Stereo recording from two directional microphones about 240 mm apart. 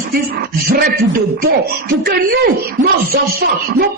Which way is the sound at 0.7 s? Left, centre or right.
Right.